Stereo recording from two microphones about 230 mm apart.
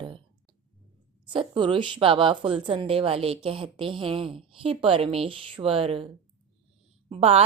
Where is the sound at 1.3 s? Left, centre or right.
Right.